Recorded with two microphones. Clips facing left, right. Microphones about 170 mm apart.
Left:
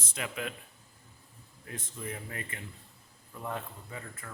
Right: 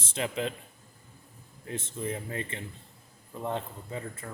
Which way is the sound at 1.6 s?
25° right (ahead or behind).